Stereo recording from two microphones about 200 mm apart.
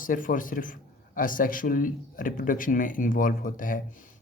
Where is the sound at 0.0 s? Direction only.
45° left (ahead or behind).